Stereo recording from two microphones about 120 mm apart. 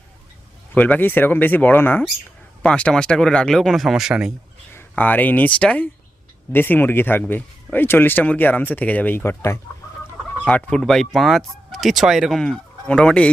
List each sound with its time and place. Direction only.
0.7 s speech: 15° left (ahead or behind); by 4.3 s 5° right (ahead or behind)
4.7 s speech: 15° left (ahead or behind)
10.4 s speech: 5° left (ahead or behind)